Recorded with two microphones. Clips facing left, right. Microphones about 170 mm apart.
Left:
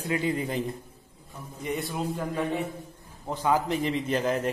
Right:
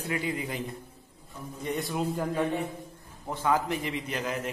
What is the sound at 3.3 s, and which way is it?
A man's voice, 15° left (ahead or behind).